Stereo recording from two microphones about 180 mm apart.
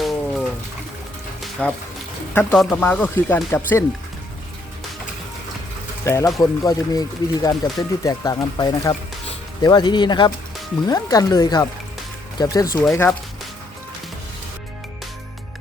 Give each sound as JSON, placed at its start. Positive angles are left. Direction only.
{"t": 0.0, "sound": "music", "side_deg": 0}
{"t": 1.6, "sound": "speech", "side_deg": 5}
{"t": 6.1, "sound": "speech", "side_deg": 15}